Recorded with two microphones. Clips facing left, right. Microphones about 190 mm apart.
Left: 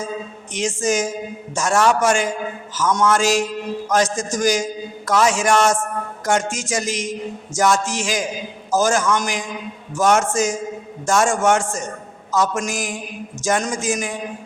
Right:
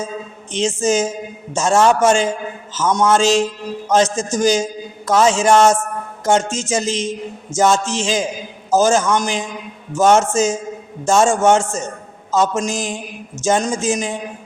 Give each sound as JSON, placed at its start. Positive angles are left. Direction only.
{"t": 0.5, "sound": "a man's voice", "side_deg": -25}